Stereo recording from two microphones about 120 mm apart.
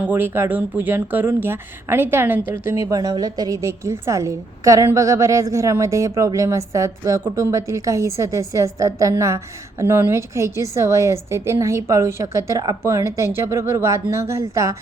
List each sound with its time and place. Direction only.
0.0 s a woman's voice: 15° right (ahead or behind)